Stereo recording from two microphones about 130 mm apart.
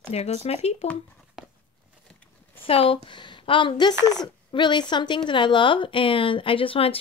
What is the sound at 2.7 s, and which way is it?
Speech, 45° left (ahead or behind).